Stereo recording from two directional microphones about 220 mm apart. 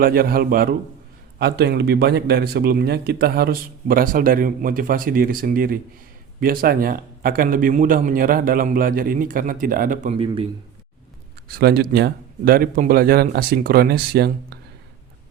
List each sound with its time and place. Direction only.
0.0 s a man's voice: 40° right (ahead or behind)
11.4 s speech: 45° right (ahead or behind)